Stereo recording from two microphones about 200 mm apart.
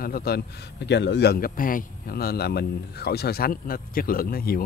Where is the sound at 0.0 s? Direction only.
50° left (ahead or behind).